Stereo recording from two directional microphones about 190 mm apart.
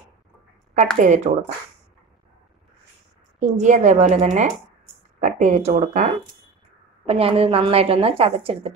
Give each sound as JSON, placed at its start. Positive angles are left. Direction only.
{"t": 0.9, "sound": "a woman's voice", "side_deg": -40}
{"t": 3.3, "sound": "a woman's voice", "side_deg": -40}